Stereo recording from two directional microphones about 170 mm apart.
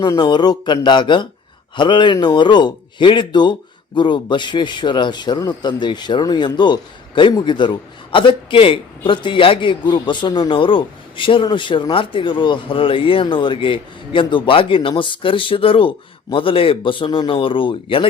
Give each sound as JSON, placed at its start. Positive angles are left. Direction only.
{"t": 0.0, "sound": "a man's voice", "side_deg": 25}